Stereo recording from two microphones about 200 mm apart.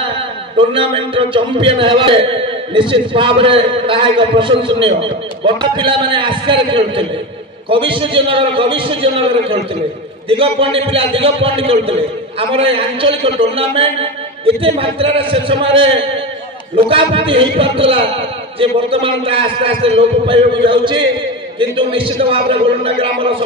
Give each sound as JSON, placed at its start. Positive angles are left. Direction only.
{"t": 0.6, "sound": "a man's voice", "side_deg": -25}